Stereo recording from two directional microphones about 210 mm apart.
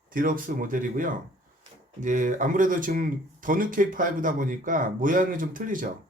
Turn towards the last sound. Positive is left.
turn(degrees=-40)  # may be behind; listen again after turning